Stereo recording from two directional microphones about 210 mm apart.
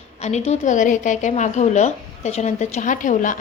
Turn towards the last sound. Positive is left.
turn(degrees=35)  # may be behind; listen again after turning